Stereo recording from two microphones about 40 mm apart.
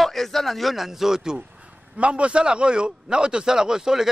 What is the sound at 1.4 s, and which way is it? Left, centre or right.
A man's voice, right.